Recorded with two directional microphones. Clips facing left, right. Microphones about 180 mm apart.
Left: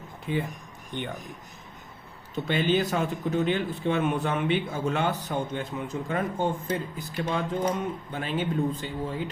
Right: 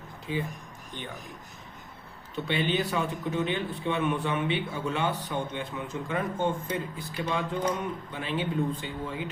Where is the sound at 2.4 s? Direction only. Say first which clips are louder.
Left 3 dB; 45° left (ahead or behind).